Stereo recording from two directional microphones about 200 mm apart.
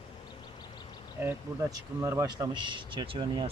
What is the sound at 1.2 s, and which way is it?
Speech, 15° right (ahead or behind).